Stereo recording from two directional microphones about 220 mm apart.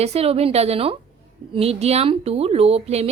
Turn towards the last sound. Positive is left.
turn(degrees=-30)  # may be behind; listen again after turning